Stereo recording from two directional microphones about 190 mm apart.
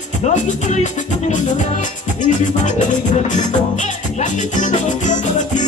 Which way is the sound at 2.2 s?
40° left (ahead or behind).